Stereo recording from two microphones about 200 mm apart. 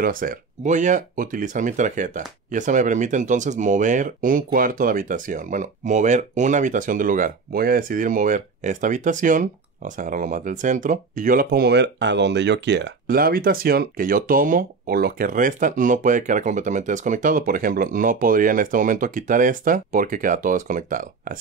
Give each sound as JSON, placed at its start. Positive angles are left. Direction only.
{"t": 0.0, "sound": "speech", "side_deg": -45}